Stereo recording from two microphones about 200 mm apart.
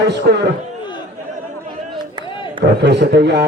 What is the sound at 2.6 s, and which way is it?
Speech, 55° right (ahead or behind).